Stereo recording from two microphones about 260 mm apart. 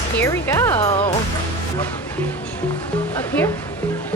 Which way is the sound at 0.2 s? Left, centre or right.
Centre.